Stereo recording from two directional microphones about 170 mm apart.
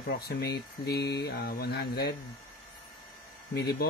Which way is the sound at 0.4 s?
70° left (ahead or behind).